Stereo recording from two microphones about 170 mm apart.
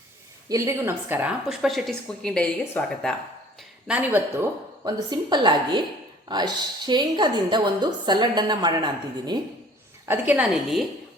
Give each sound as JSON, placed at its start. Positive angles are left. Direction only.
{"t": 0.4, "sound": "a woman's voice", "side_deg": -20}
{"t": 3.8, "sound": "a woman's voice", "side_deg": -10}
{"t": 10.1, "sound": "a woman's voice", "side_deg": -10}